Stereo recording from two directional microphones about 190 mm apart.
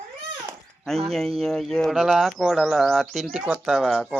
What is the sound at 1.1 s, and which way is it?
Speech, centre (ahead or behind).